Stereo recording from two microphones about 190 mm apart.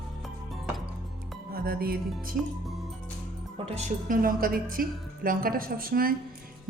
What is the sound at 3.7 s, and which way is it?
A woman's voice, 35° right (ahead or behind).